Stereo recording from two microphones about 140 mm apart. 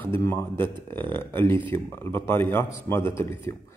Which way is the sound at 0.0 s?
20° left (ahead or behind).